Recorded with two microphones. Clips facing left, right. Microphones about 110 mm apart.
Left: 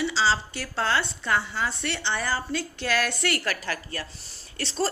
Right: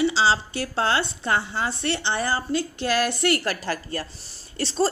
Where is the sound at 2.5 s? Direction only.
45° right (ahead or behind).